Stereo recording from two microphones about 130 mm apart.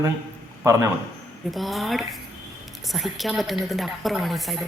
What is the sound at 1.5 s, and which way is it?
A woman's voice, centre (ahead or behind).